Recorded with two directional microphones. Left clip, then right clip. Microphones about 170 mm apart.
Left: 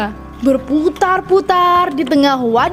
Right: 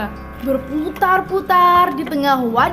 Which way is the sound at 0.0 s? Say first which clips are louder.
Left 7 dB; 45° left (ahead or behind).